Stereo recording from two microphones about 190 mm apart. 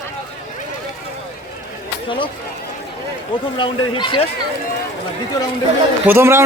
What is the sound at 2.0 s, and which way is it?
Speech, 25° left (ahead or behind).